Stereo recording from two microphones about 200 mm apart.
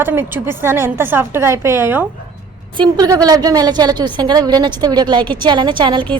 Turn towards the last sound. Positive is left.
turn(degrees=-25)  # may be behind; listen again after turning